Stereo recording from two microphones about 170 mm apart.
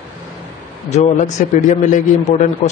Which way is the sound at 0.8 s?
40° left (ahead or behind).